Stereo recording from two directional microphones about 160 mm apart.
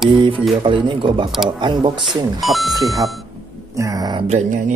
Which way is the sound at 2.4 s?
Centre (ahead or behind).